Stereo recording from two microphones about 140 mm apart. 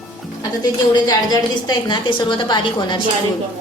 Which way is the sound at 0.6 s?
30° left (ahead or behind).